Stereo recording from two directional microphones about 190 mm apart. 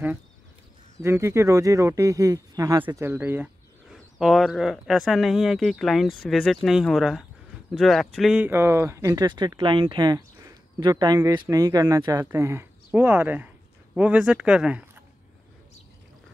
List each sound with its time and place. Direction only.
0.9 s speech: 15° right (ahead or behind)